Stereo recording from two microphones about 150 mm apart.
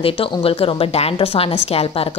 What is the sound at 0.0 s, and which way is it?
A woman's voice, 40° left (ahead or behind).